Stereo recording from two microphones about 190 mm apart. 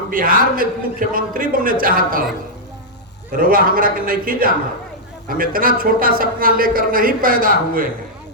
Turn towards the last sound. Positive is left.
turn(degrees=-50)  # may be behind; listen again after turning